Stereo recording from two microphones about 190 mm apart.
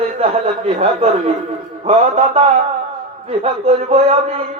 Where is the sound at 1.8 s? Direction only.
30° right (ahead or behind).